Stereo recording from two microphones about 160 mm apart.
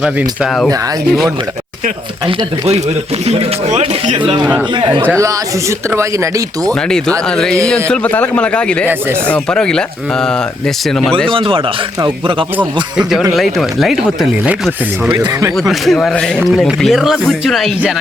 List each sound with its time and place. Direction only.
0.0 s speech: 5° right (ahead or behind)
3.2 s speech: 40° right (ahead or behind)
4.8 s speech: 30° right (ahead or behind)
5.9 s speech: 20° right (ahead or behind)
7.3 s speech: 5° left (ahead or behind)
11.3 s speech: 35° right (ahead or behind)
12.5 s speech: 5° right (ahead or behind)
15.1 s speech: 25° right (ahead or behind)
15.5 s speech: centre (ahead or behind)